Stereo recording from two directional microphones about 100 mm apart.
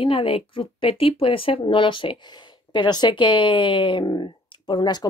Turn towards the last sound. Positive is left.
turn(degrees=45)  # may be behind; listen again after turning